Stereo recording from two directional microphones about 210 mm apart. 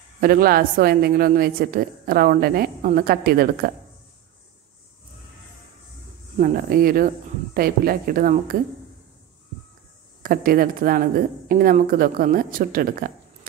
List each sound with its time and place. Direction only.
0.2 s a woman's voice: 45° right (ahead or behind)
6.3 s a woman's voice: 40° right (ahead or behind)
10.2 s a woman's voice: 45° right (ahead or behind)